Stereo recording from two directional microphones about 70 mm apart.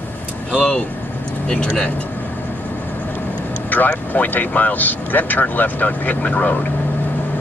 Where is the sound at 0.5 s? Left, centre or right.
Centre.